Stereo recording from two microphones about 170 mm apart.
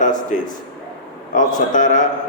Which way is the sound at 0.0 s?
50° left (ahead or behind).